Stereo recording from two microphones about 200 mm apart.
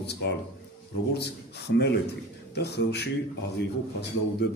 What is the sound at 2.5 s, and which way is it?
Speech, 55° left (ahead or behind).